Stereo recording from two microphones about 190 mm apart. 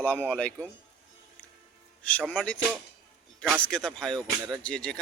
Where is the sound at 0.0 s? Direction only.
10° left (ahead or behind).